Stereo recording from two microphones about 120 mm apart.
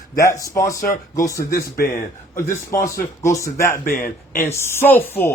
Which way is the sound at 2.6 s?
25° left (ahead or behind).